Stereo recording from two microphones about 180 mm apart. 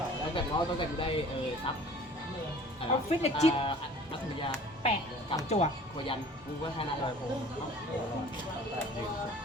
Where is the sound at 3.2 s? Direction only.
35° left (ahead or behind).